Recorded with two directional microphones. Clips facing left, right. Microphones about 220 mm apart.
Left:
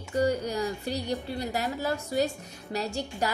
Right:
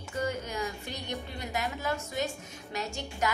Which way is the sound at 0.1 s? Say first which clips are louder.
Left 7 dB; 35° left (ahead or behind).